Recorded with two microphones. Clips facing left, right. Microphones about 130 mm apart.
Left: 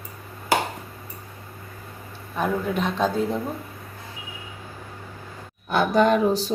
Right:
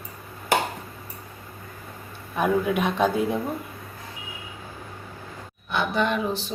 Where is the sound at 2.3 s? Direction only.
15° right (ahead or behind).